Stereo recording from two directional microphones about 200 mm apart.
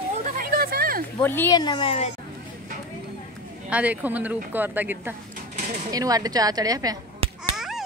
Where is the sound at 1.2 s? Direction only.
10° left (ahead or behind).